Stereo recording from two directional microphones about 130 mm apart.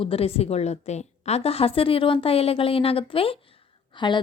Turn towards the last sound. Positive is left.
turn(degrees=35)  # may be behind; listen again after turning